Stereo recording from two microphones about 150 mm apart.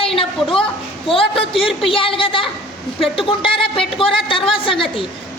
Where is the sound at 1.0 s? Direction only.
40° left (ahead or behind).